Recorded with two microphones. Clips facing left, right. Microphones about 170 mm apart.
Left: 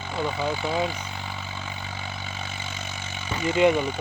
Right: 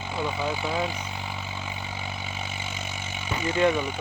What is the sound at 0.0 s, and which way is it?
Vehicle, 5° right (ahead or behind).